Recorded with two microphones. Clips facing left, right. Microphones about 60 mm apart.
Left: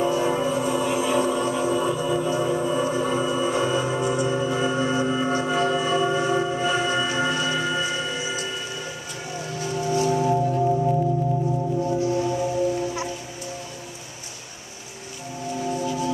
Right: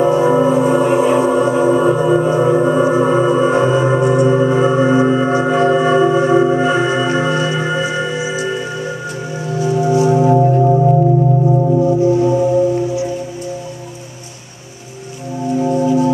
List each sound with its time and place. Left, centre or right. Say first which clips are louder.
0.0 s music: right 10 dB; right
4.5 s singing bowl: right 11 dB; right
7.5 s music: right 7 dB; right
9.6 s music: right 10 dB; right
15.6 s music: right 12 dB; right